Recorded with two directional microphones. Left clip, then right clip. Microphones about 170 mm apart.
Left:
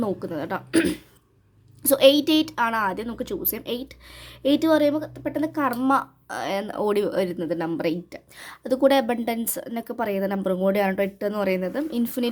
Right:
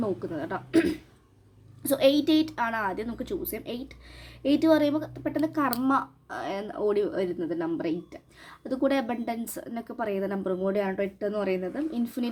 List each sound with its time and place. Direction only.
0.0 s a woman's voice: 35° left (ahead or behind)